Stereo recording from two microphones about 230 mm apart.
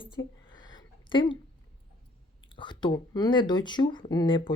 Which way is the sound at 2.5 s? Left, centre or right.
Centre.